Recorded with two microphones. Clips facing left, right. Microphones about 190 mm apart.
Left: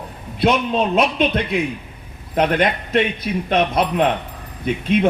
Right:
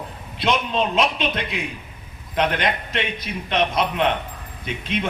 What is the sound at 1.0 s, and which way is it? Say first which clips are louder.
A man's voice: left 4 dB; 50° left (ahead or behind).